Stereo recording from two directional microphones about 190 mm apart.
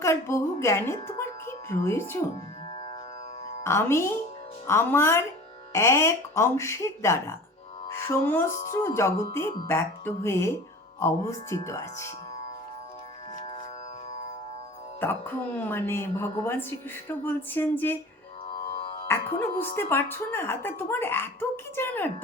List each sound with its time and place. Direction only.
0.0 s a woman's voice: 15° left (ahead or behind)
3.6 s a woman's voice: 15° left (ahead or behind)
15.0 s a woman's voice: 10° left (ahead or behind)
18.4 s music: 30° left (ahead or behind)
19.0 s a woman's voice: 10° left (ahead or behind)